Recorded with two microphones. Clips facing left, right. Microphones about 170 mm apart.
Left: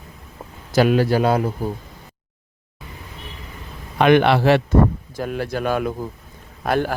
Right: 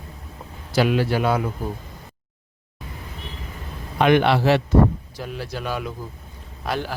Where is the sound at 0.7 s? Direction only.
45° left (ahead or behind).